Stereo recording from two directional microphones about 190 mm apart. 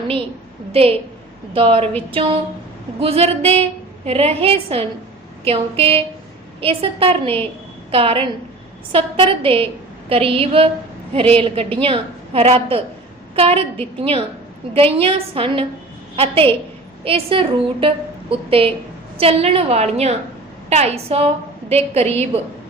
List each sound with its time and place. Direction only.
0.7 s a woman's voice: 30° right (ahead or behind)